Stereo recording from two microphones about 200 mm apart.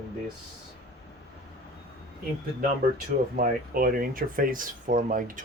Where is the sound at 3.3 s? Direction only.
45° right (ahead or behind).